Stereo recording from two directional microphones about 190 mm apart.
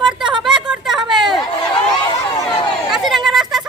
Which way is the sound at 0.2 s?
25° right (ahead or behind).